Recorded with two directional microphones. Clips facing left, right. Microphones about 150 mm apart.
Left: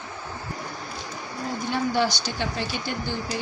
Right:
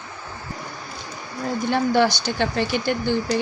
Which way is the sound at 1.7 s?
60° right (ahead or behind).